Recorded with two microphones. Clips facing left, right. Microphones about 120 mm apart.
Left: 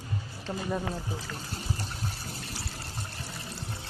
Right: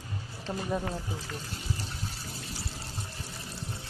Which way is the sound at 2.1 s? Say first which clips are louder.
Left 1 dB; 55° left (ahead or behind).